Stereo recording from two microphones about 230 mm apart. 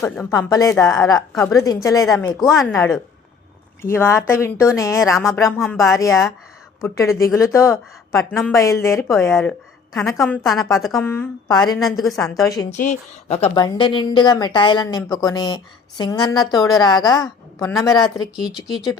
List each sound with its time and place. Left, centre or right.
0.0 s speech: centre
2.0 s a woman's voice: centre
11.8 s a woman's voice: centre
12.7 s speech: left